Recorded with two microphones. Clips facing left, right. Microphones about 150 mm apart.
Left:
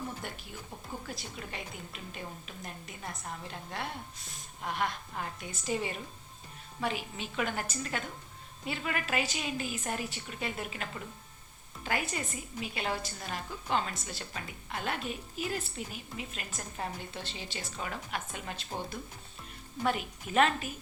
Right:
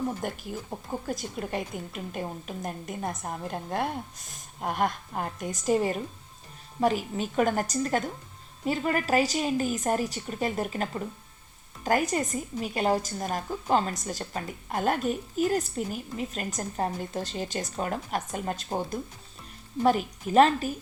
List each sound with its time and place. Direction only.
0.2 s a woman's voice: 50° right (ahead or behind)